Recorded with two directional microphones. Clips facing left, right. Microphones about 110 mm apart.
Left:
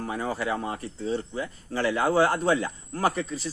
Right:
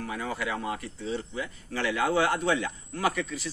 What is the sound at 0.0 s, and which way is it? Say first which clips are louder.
A man's voice: left 3 dB; 35° left (ahead or behind).